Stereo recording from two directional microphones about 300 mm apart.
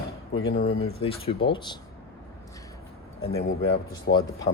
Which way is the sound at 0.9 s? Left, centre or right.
Centre.